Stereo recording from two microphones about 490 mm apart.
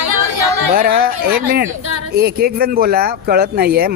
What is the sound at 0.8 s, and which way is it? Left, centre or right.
Speech, centre.